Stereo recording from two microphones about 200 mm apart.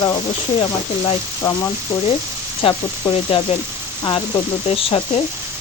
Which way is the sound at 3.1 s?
30° left (ahead or behind).